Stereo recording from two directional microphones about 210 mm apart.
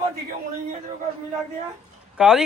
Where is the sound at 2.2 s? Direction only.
5° right (ahead or behind).